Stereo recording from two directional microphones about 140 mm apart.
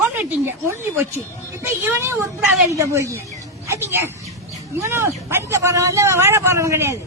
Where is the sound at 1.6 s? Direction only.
15° right (ahead or behind).